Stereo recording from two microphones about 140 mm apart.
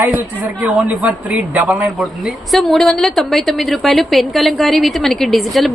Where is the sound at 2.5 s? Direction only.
Centre (ahead or behind).